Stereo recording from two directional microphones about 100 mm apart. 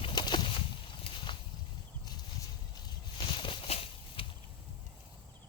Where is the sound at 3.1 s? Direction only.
55° left (ahead or behind); by 4.2 s 80° left.